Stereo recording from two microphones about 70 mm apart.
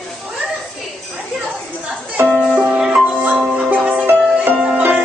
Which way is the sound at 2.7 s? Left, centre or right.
Centre.